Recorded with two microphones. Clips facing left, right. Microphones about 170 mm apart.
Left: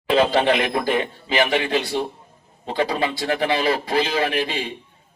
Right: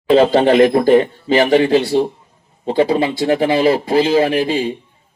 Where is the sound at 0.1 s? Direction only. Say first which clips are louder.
Right 7 dB; 35° right (ahead or behind).